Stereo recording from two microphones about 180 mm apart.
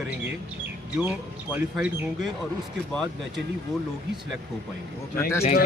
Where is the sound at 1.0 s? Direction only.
5° right (ahead or behind).